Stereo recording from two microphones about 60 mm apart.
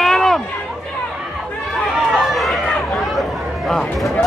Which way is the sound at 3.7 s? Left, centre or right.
Centre.